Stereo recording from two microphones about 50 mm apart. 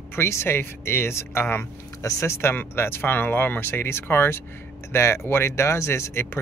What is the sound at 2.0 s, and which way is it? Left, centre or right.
Speech, left.